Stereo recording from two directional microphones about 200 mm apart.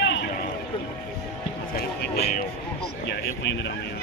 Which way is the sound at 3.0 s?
60° left (ahead or behind).